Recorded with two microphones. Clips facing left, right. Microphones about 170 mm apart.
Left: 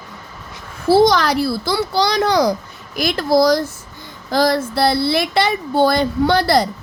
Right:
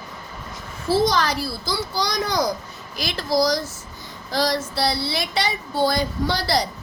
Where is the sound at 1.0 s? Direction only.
65° left (ahead or behind).